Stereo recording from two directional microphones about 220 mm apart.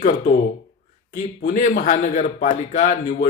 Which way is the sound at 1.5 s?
35° left (ahead or behind).